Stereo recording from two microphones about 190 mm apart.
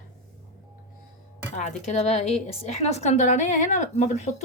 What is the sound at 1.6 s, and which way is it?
A woman's voice, 35° left (ahead or behind).